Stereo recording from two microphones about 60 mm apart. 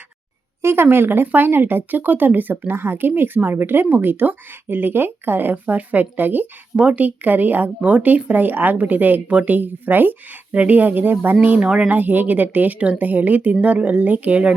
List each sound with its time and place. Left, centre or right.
0.6 s speech: right